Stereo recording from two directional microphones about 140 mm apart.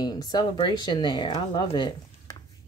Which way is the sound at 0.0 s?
30° left (ahead or behind).